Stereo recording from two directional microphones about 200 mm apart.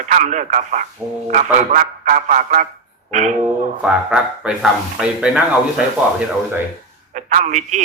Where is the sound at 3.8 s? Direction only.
5° right (ahead or behind).